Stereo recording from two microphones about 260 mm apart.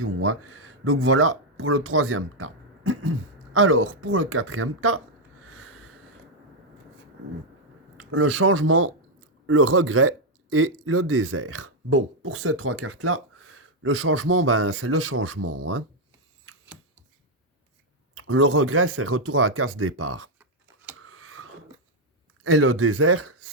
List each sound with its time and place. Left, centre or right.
0.0 s speech: right
5.5 s a sound: right
8.1 s speech: right
18.1 s speech: right
21.0 s a sound: right
22.4 s speech: right